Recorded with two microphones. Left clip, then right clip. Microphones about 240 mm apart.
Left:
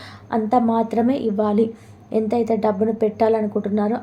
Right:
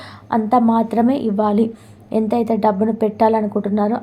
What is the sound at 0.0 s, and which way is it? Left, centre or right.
A woman's voice, centre.